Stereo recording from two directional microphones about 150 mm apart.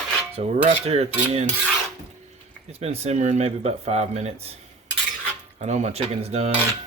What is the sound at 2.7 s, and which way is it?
Speech, 45° right (ahead or behind).